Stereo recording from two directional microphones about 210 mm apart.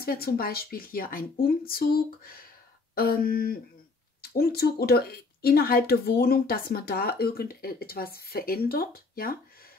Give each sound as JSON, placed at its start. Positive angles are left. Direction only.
{"t": 0.0, "sound": "speech", "side_deg": 45}